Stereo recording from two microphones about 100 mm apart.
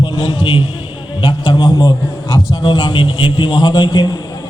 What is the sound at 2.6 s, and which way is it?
A man's voice, 50° left (ahead or behind).